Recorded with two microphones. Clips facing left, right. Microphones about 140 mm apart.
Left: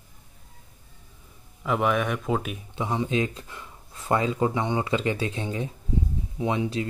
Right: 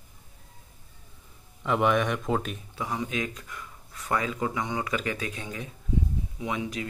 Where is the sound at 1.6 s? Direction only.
Centre (ahead or behind).